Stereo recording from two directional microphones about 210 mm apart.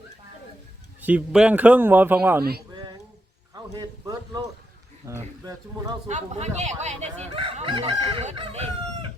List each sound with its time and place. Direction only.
1.0 s speech: 5° right (ahead or behind)
2.4 s speech: 50° right (ahead or behind)
3.5 s a sound: 20° right (ahead or behind)
5.0 s speech: 15° right (ahead or behind)
6.1 s fowl: 35° right (ahead or behind)